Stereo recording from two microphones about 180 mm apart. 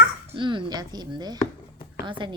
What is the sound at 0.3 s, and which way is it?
A woman's voice, 25° right (ahead or behind).